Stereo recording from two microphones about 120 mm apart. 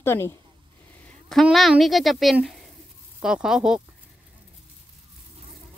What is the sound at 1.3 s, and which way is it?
Speech, centre (ahead or behind).